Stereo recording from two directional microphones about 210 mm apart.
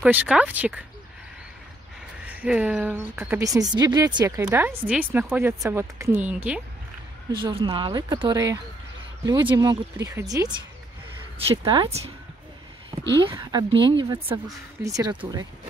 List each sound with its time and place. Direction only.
0.0 s a woman's voice: 5° right (ahead or behind)
2.2 s a woman's voice: 5° right (ahead or behind)
4.4 s a woman's voice: 5° right (ahead or behind)
7.2 s a woman's voice: 20° right (ahead or behind)
13.3 s a woman's voice: 20° right (ahead or behind)